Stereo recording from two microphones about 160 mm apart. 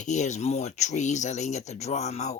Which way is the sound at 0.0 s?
50° left (ahead or behind).